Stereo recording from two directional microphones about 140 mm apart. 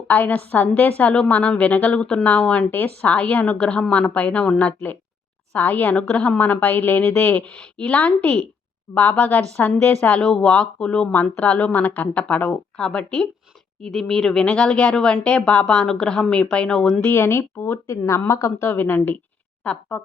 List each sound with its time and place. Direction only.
0.1 s a woman's voice: 10° left (ahead or behind)
17.1 s a woman's voice: 15° left (ahead or behind)